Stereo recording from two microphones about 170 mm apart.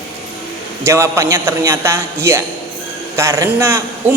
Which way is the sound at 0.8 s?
20° right (ahead or behind).